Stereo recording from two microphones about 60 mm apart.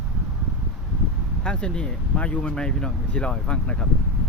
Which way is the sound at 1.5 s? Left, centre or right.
Centre.